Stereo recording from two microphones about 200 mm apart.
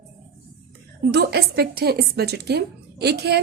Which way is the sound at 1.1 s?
55° right (ahead or behind).